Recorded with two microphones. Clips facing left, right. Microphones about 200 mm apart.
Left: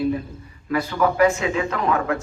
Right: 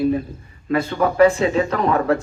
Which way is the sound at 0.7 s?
30° right (ahead or behind).